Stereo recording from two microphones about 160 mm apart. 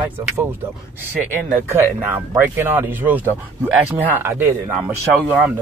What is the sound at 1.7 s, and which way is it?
Speech, 10° right (ahead or behind).